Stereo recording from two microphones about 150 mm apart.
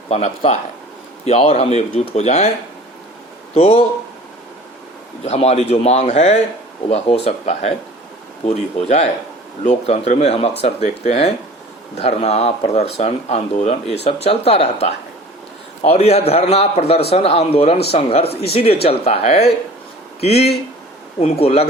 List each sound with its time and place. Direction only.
0.1 s a man's voice: 45° left (ahead or behind)
3.5 s a man's voice: 45° left (ahead or behind)
5.2 s a man's voice: 45° left (ahead or behind)